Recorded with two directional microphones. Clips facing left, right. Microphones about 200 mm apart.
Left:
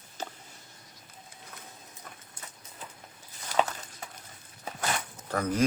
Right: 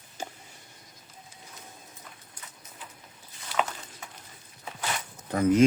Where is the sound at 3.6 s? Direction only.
40° left (ahead or behind).